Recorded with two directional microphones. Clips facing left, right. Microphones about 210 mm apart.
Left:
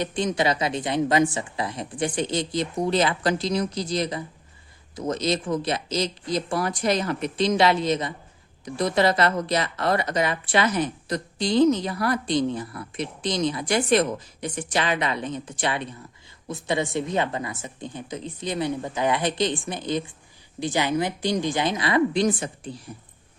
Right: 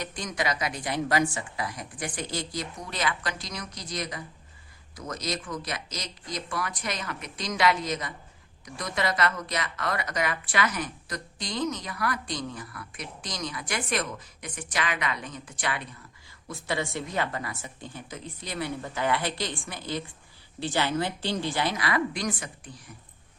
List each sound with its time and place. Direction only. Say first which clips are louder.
0.0 s speech: left 8 dB; 25° left (ahead or behind)